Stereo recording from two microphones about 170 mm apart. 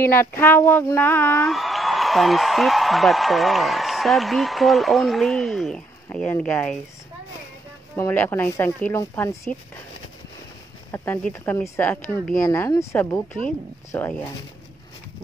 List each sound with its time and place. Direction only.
0.0 s speech: 15° left (ahead or behind)
1.5 s a man's voice: centre (ahead or behind)
7.9 s speech: 10° left (ahead or behind)
10.9 s speech: 15° left (ahead or behind)